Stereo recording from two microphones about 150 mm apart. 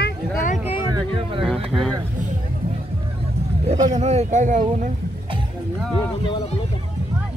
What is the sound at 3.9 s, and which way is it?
Speech, 45° right (ahead or behind).